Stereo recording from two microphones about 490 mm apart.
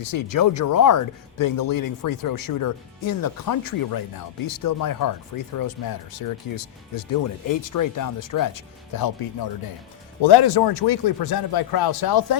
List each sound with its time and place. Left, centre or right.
0.0 s speech: left